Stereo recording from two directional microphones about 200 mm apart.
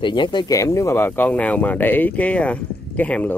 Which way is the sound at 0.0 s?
25° left (ahead or behind).